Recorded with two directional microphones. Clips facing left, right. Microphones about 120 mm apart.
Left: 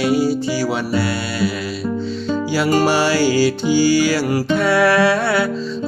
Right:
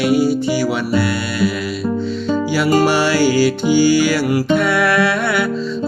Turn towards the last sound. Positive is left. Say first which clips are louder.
# left 1 dB
turn(degrees=35)  # may be behind; listen again after turning